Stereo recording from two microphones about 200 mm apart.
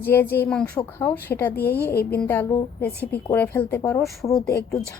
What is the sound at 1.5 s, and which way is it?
Speech, 50° left (ahead or behind).